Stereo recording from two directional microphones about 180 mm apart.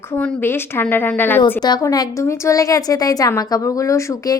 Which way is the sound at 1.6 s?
20° left (ahead or behind).